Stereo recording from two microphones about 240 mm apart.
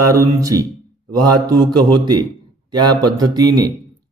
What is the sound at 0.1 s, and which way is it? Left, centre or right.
Speech, centre.